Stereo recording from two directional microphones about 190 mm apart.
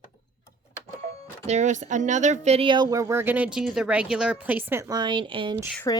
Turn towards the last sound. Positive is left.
turn(degrees=20)  # may be behind; listen again after turning